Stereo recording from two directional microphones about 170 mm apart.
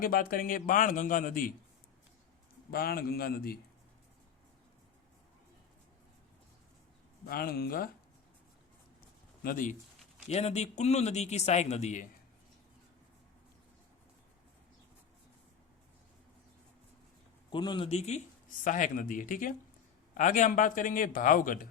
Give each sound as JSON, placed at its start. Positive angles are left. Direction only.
{"t": 0.0, "sound": "a man's voice", "side_deg": 55}
{"t": 2.6, "sound": "a man's voice", "side_deg": 60}
{"t": 7.3, "sound": "a man's voice", "side_deg": 65}
{"t": 9.0, "sound": "a sound", "side_deg": 60}
{"t": 10.2, "sound": "a man's voice", "side_deg": 40}
{"t": 17.5, "sound": "a man's voice", "side_deg": 25}